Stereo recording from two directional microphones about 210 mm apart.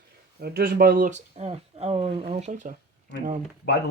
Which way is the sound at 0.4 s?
45° right (ahead or behind).